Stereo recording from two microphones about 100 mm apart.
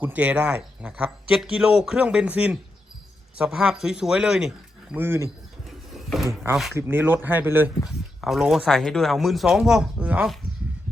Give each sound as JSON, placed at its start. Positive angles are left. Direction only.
{"t": 0.0, "sound": "speech", "side_deg": -15}
{"t": 4.9, "sound": "speech", "side_deg": -25}
{"t": 5.6, "sound": "printer", "side_deg": 0}
{"t": 6.7, "sound": "speech", "side_deg": -20}
{"t": 7.9, "sound": "speech", "side_deg": -5}